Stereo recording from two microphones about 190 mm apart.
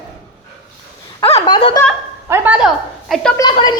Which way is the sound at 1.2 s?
25° left (ahead or behind).